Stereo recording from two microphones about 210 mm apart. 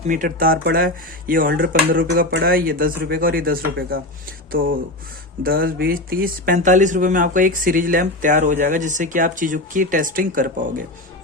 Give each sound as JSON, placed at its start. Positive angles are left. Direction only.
{"t": 0.1, "sound": "speech", "side_deg": -40}
{"t": 2.0, "sound": "speech", "side_deg": -55}